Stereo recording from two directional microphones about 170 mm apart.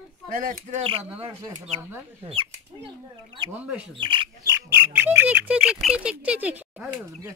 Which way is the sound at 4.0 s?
30° right (ahead or behind).